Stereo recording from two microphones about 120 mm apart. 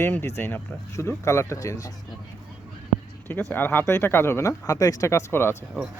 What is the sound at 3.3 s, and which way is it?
Speech, 20° left (ahead or behind).